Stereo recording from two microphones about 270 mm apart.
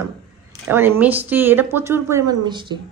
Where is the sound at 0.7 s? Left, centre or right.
Centre.